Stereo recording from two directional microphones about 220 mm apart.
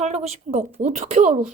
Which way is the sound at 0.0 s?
30° right (ahead or behind).